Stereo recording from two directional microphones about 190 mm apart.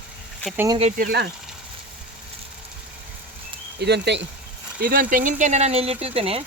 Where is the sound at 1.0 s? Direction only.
55° right (ahead or behind).